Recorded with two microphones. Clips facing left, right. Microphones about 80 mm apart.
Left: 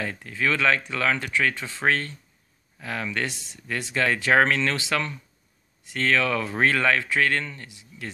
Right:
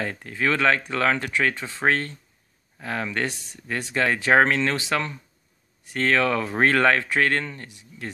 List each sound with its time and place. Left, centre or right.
0.0 s speech: right